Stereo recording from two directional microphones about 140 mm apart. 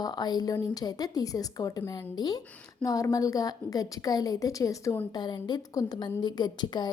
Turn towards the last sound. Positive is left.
turn(degrees=30)  # may be behind; listen again after turning